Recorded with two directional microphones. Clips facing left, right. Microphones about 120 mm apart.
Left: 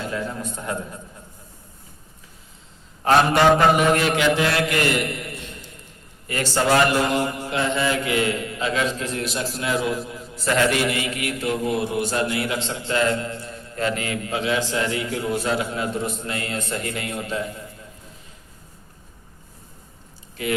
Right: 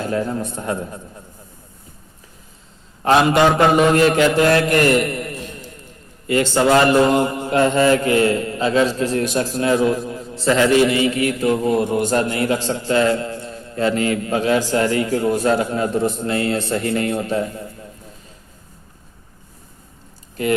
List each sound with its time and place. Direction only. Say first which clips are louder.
0.1 s a man's voice: right 6 dB; 35° right (ahead or behind)
3.1 s a man's voice: right 2 dB; 20° right (ahead or behind)
3.8 s mantra: right 6 dB; 40° right (ahead or behind)
6.2 s a man's voice: right 6 dB; 25° right (ahead or behind)
7.1 s mantra: right 6 dB; 35° right (ahead or behind)
7.6 s a man's voice: right 8 dB; 45° right (ahead or behind)
12.6 s a man's voice: right 4 dB; 30° right (ahead or behind)
20.3 s speech: right 6 dB; 45° right (ahead or behind)